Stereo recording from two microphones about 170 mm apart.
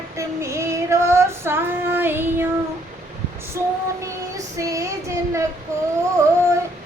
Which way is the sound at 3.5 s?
20° right (ahead or behind).